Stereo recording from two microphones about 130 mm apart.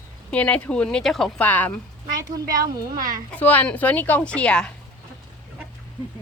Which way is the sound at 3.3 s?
15° left (ahead or behind).